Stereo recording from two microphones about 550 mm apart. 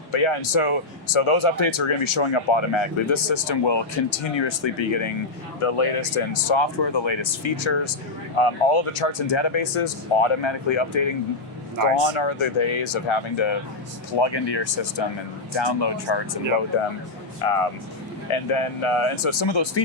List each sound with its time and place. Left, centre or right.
0.1 s speech: left
12.1 s speech: left
17.4 s speech: left
18.3 s speech: left